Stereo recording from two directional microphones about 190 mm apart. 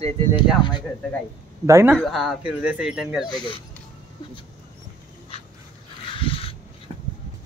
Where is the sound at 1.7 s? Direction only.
15° right (ahead or behind).